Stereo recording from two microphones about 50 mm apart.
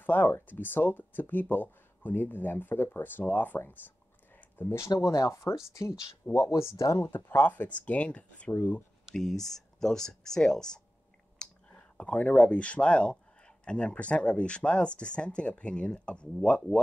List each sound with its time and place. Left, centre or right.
0.0 s speech: left
4.6 s speech: left
7.1 s speech: left
7.4 s speech: left
9.1 s speech: centre
11.4 s clicking: centre
12.0 s speech: left